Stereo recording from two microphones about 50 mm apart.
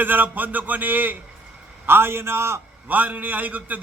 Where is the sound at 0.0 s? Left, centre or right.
Right.